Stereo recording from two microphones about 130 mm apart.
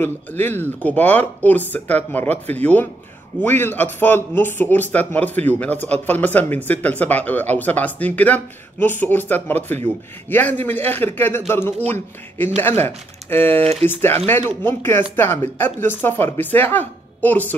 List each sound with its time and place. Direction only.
0.0 s a man's voice: 15° left (ahead or behind)